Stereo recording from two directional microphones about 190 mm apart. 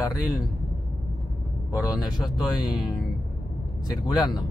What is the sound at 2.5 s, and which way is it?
Speech, 20° left (ahead or behind).